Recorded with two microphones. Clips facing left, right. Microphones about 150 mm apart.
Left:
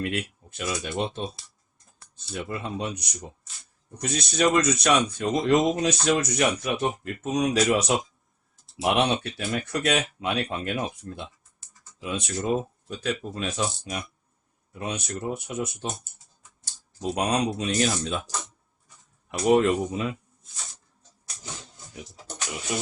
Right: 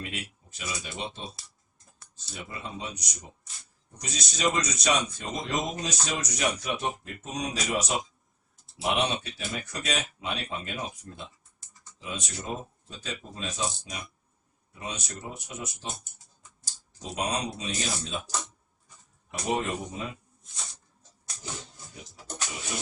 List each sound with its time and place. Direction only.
0.0 s speech: 60° left (ahead or behind)
19.3 s speech: 75° left (ahead or behind)